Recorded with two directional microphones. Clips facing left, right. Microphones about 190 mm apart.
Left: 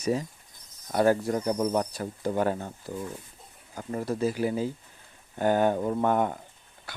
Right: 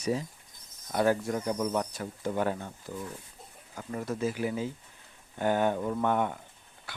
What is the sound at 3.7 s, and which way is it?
Speech, 35° left (ahead or behind).